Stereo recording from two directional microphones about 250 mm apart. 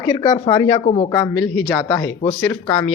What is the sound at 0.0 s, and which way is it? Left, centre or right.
Speech, centre.